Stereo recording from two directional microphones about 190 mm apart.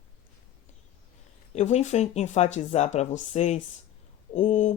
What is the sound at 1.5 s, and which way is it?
Speech, 35° left (ahead or behind).